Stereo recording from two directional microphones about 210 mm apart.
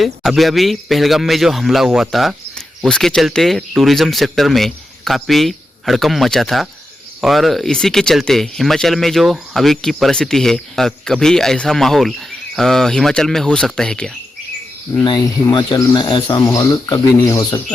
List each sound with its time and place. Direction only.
0.0 s a man's voice: centre (ahead or behind)
14.9 s speech: 20° left (ahead or behind)